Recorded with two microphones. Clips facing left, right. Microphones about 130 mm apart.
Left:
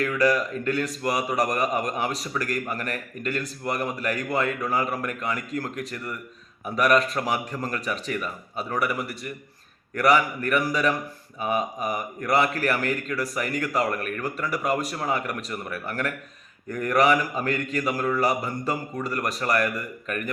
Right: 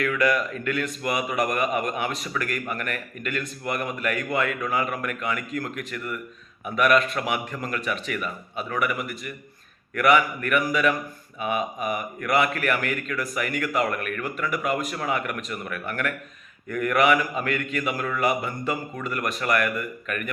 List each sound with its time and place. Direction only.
0.0 s a man's voice: 35° left (ahead or behind)